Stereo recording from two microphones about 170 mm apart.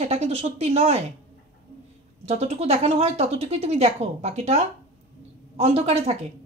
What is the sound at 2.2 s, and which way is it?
A woman's voice, 40° right (ahead or behind).